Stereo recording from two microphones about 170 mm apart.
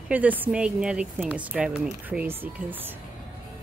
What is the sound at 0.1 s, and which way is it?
Speech, 10° right (ahead or behind).